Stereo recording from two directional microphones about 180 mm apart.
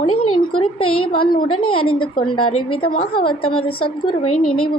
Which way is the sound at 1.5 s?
30° left (ahead or behind).